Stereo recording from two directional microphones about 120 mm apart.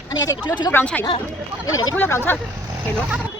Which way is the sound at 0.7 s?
15° left (ahead or behind).